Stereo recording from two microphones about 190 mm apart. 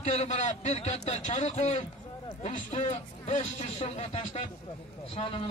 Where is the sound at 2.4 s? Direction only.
40° left (ahead or behind).